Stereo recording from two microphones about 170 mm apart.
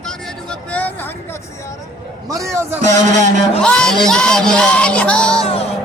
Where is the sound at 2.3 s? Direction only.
20° right (ahead or behind).